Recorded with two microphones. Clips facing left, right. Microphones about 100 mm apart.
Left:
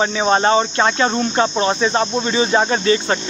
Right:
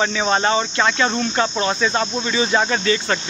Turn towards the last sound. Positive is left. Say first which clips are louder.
# left 3 dB
turn(degrees=30)  # may be behind; listen again after turning